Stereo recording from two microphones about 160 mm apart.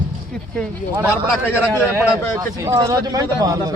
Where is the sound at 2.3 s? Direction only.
20° right (ahead or behind).